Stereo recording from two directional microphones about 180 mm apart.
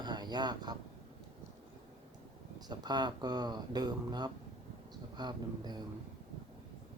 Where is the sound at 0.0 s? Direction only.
25° right (ahead or behind).